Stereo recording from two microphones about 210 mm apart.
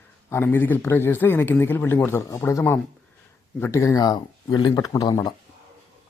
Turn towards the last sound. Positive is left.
turn(degrees=20)  # may be behind; listen again after turning